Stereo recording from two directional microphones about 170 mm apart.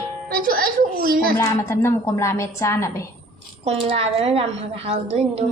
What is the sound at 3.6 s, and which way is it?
A woman's voice, 35° right (ahead or behind).